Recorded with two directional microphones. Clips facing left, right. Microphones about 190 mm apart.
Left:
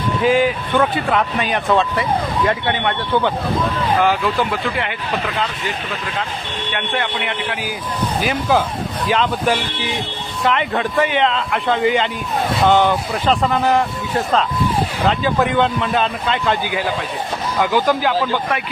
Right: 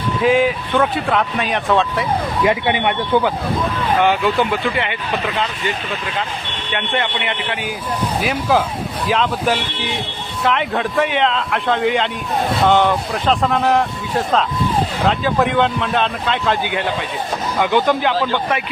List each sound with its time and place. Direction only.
0.2 s speech: centre (ahead or behind)
2.4 s speech: 15° right (ahead or behind)
3.9 s speech: centre (ahead or behind)
6.7 s speech: centre (ahead or behind)